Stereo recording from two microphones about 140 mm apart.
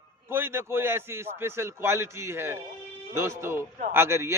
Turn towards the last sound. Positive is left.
turn(degrees=-20)  # may be behind; listen again after turning